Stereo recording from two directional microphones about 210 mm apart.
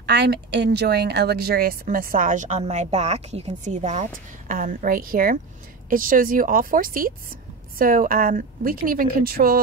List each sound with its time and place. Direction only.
0.0 s speech: 50° right (ahead or behind)